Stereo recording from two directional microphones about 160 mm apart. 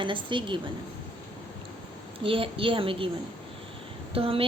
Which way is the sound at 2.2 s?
35° right (ahead or behind).